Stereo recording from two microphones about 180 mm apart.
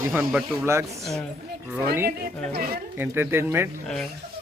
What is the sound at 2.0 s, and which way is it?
Speech, 55° right (ahead or behind).